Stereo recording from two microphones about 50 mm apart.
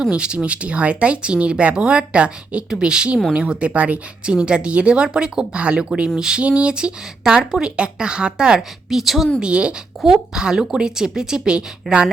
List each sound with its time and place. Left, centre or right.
0.0 s speech: right; by 9.3 s centre
9.4 s speech: right